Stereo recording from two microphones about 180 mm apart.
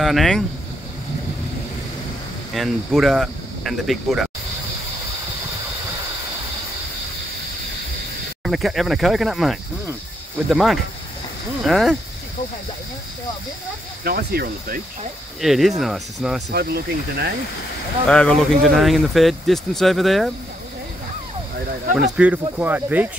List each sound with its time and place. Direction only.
0.0 s speech: centre (ahead or behind)
2.5 s speech: centre (ahead or behind)
8.5 s speech: centre (ahead or behind)
14.0 s speech: 60° right (ahead or behind)
15.4 s speech: centre (ahead or behind)
16.4 s speech: 65° right (ahead or behind)
18.0 s speech: 5° left (ahead or behind)
22.1 s speech: 5° right (ahead or behind)